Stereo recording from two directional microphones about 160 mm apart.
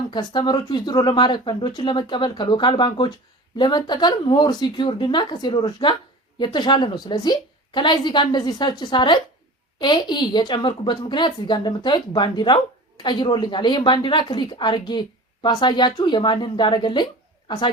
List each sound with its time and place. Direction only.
0.1 s a woman's voice: 30° left (ahead or behind)